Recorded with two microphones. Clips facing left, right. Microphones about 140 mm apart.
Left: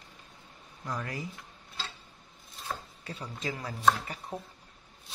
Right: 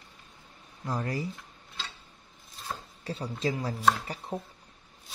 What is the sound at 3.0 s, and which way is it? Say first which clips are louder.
Speech: right 6 dB; 30° right (ahead or behind).